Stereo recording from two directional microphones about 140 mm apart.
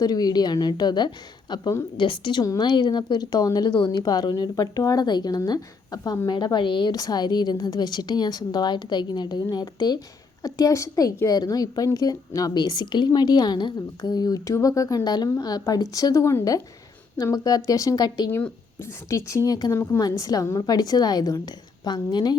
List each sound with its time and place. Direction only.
0.0 s a woman's voice: 30° left (ahead or behind)
18.3 s a woman's voice: 15° left (ahead or behind)